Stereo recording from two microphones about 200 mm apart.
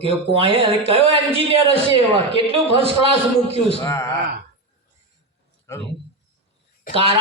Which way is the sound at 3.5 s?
30° left (ahead or behind).